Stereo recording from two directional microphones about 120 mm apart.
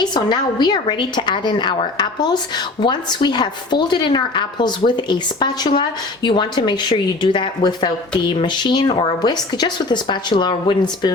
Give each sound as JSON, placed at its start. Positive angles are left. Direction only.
{"t": 0.0, "sound": "a woman's voice", "side_deg": 40}